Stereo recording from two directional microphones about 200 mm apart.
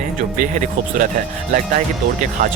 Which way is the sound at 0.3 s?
40° right (ahead or behind).